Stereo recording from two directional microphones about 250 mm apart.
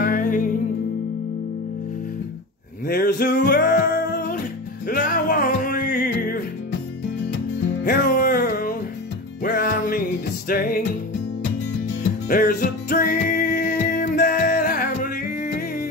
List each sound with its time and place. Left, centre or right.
0.0 s music: left
2.9 s music: left
7.8 s music: left
12.3 s music: left